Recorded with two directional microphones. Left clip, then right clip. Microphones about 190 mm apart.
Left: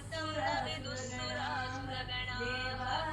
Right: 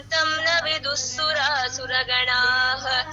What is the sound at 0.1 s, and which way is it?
Music, 45° right (ahead or behind).